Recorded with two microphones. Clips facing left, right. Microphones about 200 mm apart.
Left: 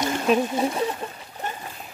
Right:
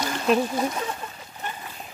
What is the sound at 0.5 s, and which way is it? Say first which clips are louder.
Speech: left 2 dB; 30° left (ahead or behind).